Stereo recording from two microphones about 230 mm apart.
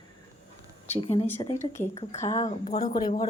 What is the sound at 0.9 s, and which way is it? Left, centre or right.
Speech, left.